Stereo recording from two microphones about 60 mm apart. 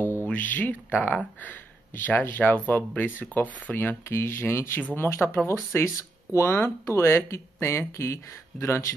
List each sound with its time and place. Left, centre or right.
0.3 s speech: left